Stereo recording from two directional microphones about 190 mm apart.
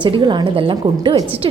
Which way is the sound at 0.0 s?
25° right (ahead or behind).